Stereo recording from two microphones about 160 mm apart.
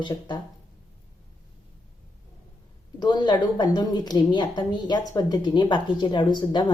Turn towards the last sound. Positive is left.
turn(degrees=30)  # may be behind; listen again after turning